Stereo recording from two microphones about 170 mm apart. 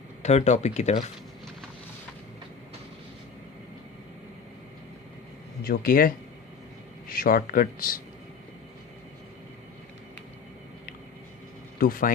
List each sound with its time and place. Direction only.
0.2 s speech: 40° left (ahead or behind)
5.6 s a man's voice: 60° left (ahead or behind)
11.8 s a man's voice: 55° left (ahead or behind)